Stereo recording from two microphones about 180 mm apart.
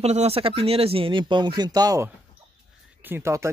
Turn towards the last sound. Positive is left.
turn(degrees=-15)  # may be behind; listen again after turning